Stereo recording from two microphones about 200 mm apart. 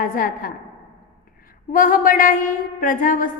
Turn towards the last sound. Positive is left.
turn(degrees=40)  # may be behind; listen again after turning